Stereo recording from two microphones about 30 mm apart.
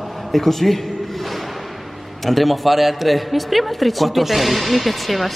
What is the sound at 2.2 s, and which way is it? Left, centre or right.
Speech, centre.